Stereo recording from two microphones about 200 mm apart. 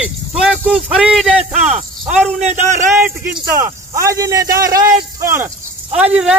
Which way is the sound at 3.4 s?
15° right (ahead or behind).